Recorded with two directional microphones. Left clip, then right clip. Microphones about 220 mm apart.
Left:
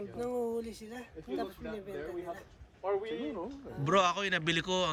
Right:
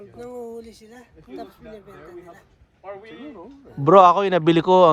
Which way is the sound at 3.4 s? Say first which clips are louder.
Right 3 dB; 15° right (ahead or behind).